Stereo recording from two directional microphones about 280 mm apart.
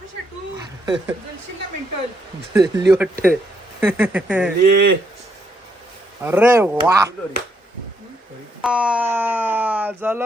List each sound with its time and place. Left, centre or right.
0.5 s a sound: centre
2.5 s speech: centre
4.6 s speech: right
6.2 s speech: centre
8.6 s speech: centre